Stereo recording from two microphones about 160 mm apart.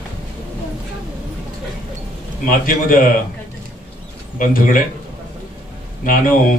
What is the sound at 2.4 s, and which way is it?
Speech, 55° left (ahead or behind).